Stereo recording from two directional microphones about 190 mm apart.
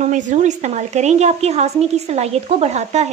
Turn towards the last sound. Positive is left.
turn(degrees=-35)  # may be behind; listen again after turning